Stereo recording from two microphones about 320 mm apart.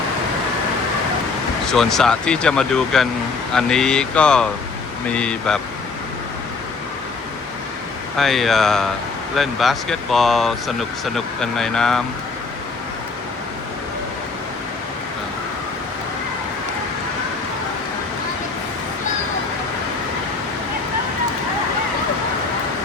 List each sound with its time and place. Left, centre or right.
1.6 s speech: centre
8.1 s speech: centre